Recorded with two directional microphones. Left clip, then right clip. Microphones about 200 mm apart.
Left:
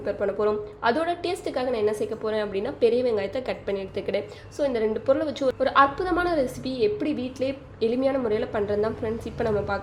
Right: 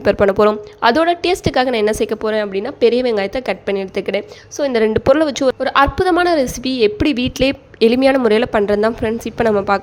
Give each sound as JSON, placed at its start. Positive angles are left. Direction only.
{"t": 0.0, "sound": "a woman's voice", "side_deg": -45}